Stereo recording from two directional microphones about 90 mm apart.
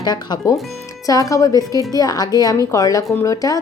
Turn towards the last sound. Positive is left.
turn(degrees=40)  # may be behind; listen again after turning